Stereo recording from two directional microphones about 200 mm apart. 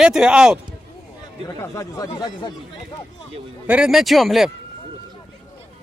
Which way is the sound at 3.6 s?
5° right (ahead or behind).